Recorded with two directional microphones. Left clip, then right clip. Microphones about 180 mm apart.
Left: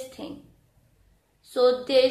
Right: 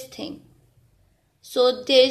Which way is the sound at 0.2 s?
45° right (ahead or behind).